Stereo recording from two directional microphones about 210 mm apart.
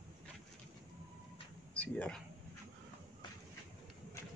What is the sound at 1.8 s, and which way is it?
Speech, 5° left (ahead or behind).